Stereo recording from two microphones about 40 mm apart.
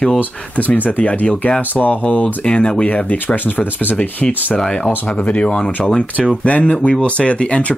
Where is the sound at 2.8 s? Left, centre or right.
Left.